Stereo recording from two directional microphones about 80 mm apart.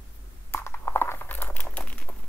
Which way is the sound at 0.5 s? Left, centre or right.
Left.